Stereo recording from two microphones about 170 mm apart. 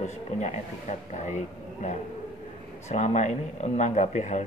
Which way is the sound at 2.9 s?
45° left (ahead or behind).